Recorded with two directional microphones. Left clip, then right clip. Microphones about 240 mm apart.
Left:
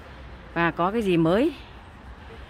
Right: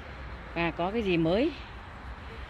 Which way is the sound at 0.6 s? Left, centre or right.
Left.